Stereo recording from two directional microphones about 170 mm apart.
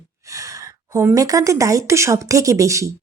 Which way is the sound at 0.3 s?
20° right (ahead or behind).